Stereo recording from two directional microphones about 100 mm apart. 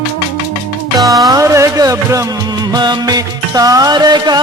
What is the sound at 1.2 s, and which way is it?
Music, 35° right (ahead or behind).